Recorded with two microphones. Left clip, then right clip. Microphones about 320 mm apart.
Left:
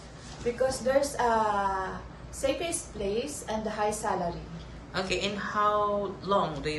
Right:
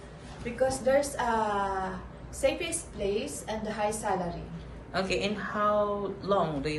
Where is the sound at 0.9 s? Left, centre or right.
Centre.